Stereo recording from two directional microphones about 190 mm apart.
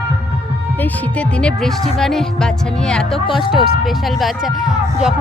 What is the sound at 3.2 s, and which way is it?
Speech, 25° left (ahead or behind).